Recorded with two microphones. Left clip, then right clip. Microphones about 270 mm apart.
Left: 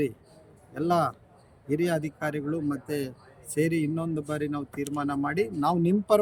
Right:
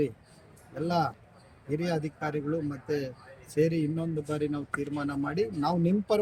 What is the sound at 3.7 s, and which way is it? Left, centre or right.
A man's voice, left.